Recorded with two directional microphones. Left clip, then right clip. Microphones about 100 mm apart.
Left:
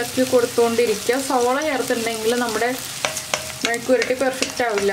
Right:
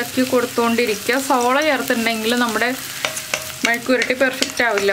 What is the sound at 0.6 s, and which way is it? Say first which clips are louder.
Frying: even; 45° right (ahead or behind).